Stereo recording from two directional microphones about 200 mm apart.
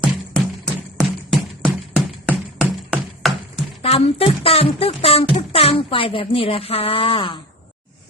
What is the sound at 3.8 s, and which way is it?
Music, 30° left (ahead or behind).